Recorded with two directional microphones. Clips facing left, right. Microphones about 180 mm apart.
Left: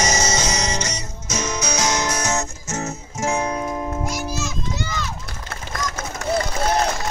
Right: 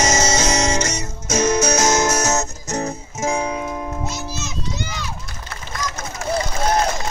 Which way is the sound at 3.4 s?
5° right (ahead or behind).